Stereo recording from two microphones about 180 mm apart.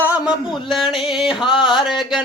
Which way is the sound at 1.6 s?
25° left (ahead or behind).